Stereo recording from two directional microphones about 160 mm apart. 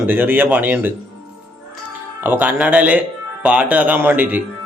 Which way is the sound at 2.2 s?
10° right (ahead or behind).